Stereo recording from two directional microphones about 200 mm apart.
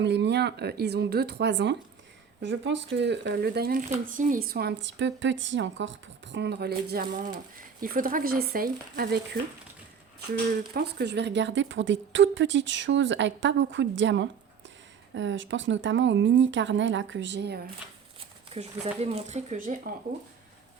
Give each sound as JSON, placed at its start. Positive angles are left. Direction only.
{"t": 0.0, "sound": "a woman's voice", "side_deg": -60}
{"t": 10.8, "sound": "a woman's voice", "side_deg": -55}
{"t": 18.2, "sound": "speech", "side_deg": -30}